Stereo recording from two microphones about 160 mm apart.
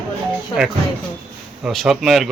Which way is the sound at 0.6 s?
5° right (ahead or behind).